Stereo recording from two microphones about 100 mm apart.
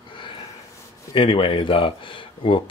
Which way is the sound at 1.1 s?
60° left (ahead or behind).